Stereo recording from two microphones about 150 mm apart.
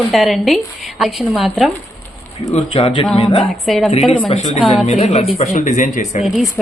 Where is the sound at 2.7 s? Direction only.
35° left (ahead or behind).